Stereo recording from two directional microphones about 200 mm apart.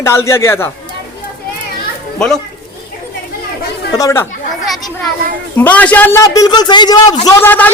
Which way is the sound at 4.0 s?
15° left (ahead or behind).